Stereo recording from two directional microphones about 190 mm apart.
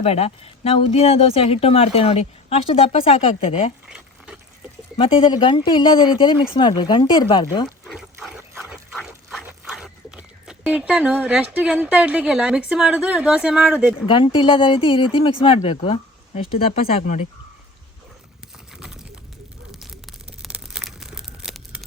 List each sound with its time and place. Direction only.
0.0 s speech: 30° left (ahead or behind)
3.8 s a sound: 5° right (ahead or behind)
4.9 s speech: 30° left (ahead or behind)
7.9 s pig: centre (ahead or behind)
8.4 s dog: 10° right (ahead or behind)
9.0 s speech: 5° right (ahead or behind)
14.1 s speech: 25° left (ahead or behind)
18.8 s a sound: 5° right (ahead or behind)
19.7 s tearing: centre (ahead or behind)